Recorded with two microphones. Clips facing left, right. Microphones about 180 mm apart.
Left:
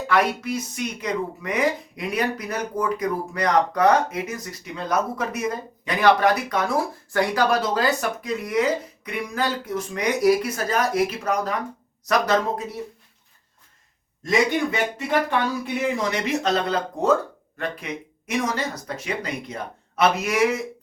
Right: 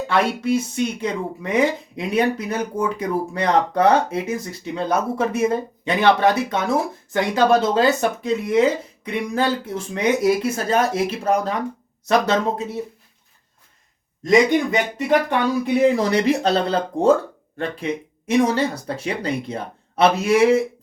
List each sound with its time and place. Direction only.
0.1 s speech: 25° right (ahead or behind)
14.3 s speech: 20° right (ahead or behind)
15.8 s speech: 35° right (ahead or behind)